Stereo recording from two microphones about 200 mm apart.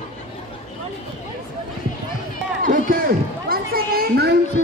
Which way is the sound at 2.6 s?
45° right (ahead or behind).